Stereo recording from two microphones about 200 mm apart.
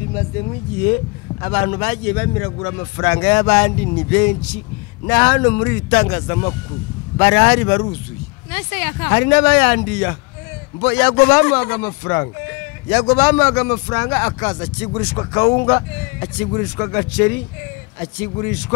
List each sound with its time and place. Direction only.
1.4 s a man's voice: 15° left (ahead or behind)
18.4 s a man's voice: 15° left (ahead or behind)